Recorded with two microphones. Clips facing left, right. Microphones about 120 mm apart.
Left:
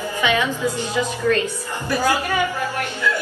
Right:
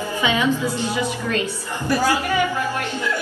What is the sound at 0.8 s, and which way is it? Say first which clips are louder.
Speech: left 1 dB; 15° right (ahead or behind).